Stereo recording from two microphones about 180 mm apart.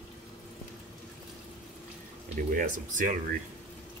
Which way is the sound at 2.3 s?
45° right (ahead or behind).